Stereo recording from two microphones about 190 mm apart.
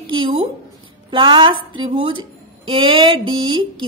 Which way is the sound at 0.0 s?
25° right (ahead or behind).